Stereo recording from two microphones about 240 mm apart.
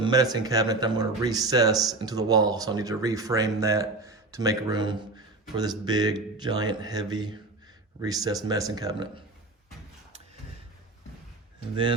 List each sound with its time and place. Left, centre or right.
0.0 s speech: centre